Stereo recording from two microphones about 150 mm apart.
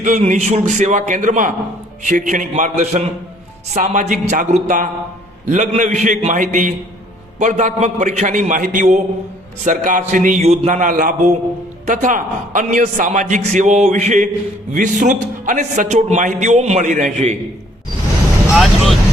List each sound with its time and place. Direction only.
0.0 s a man's voice: 55° right (ahead or behind)
18.5 s speech: centre (ahead or behind)